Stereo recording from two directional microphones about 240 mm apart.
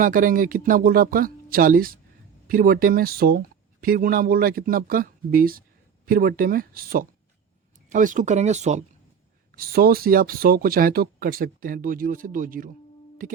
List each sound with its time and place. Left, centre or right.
0.0 s speech: right